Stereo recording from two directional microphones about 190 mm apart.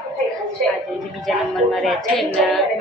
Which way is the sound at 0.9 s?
Centre (ahead or behind).